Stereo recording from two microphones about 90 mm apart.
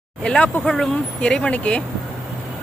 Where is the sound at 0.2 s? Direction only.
10° left (ahead or behind).